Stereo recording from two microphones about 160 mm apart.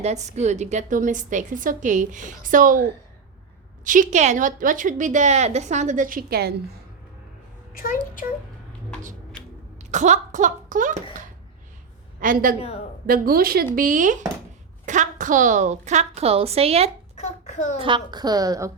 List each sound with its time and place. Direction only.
0.0 s a woman's voice: 45° right (ahead or behind)
3.8 s a woman's voice: 55° right (ahead or behind); by 6.6 s 80° right
7.7 s speech: 60° left (ahead or behind)
9.9 s a woman's voice: 50° right (ahead or behind)
12.2 s speech: 60° right (ahead or behind)
12.5 s a woman's voice: 40° left (ahead or behind)
13.1 s a woman's voice: 65° right (ahead or behind)
13.7 s a woman's voice: 55° right (ahead or behind); by 16.9 s 40° right (ahead or behind)
17.2 s child singing: 45° left (ahead or behind)
17.7 s a woman's voice: 30° right (ahead or behind)